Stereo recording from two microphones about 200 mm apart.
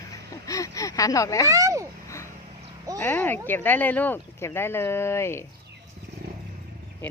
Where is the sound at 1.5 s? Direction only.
15° right (ahead or behind).